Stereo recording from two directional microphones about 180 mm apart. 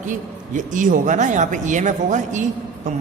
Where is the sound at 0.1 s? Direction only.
45° right (ahead or behind).